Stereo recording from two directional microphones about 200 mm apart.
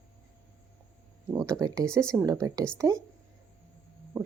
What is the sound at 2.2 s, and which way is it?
Speech, 15° right (ahead or behind).